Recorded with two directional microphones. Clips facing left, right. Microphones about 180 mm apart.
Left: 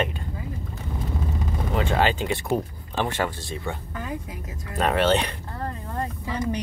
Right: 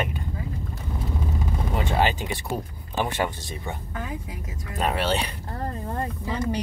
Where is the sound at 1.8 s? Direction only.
15° right (ahead or behind).